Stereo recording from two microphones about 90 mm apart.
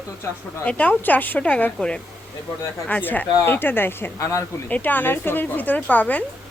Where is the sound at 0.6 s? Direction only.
15° left (ahead or behind); by 4.4 s 30° left (ahead or behind).